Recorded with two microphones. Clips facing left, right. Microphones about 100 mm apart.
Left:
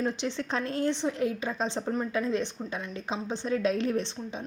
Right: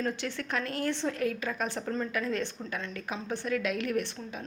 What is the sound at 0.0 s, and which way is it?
A woman's voice, 20° left (ahead or behind).